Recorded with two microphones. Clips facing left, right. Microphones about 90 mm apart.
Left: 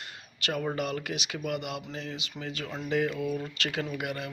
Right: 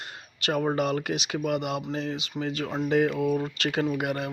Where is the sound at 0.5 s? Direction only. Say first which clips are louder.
Right 6 dB; 35° right (ahead or behind).